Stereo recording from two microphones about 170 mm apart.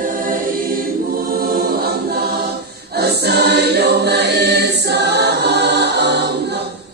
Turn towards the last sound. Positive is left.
turn(degrees=-85)